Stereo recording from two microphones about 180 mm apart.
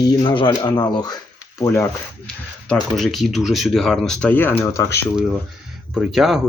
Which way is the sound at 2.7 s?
Centre (ahead or behind).